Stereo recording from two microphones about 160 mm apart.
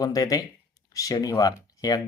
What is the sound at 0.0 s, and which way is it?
Speech, 20° left (ahead or behind).